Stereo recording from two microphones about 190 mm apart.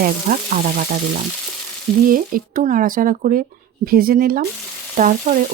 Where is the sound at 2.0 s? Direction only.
45° right (ahead or behind).